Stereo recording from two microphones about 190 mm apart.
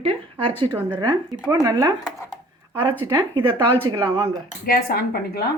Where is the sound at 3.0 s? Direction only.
20° right (ahead or behind).